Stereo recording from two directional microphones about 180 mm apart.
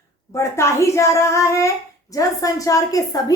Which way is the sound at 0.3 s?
15° left (ahead or behind).